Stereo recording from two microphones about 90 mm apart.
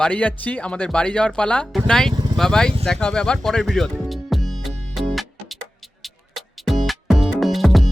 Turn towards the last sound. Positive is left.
turn(degrees=0)  # may be behind; listen again after turning